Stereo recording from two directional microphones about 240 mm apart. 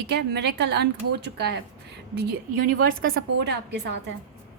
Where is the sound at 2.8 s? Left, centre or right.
Right.